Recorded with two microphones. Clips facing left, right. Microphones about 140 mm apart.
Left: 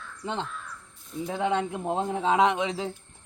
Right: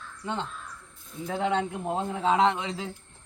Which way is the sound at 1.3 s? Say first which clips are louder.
Even; 20° left (ahead or behind).